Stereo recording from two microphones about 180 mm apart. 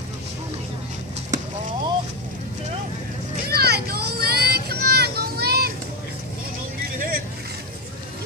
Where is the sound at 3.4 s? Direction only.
60° right (ahead or behind).